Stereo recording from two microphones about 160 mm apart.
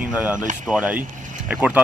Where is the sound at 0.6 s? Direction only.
10° right (ahead or behind).